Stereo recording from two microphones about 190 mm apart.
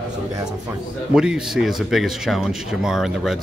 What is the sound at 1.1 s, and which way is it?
Speech, 5° right (ahead or behind).